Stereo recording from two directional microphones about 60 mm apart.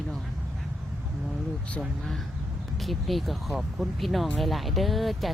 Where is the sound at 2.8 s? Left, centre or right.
Centre.